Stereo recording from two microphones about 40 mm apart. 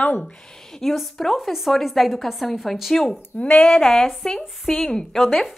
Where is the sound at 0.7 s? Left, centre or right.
Centre.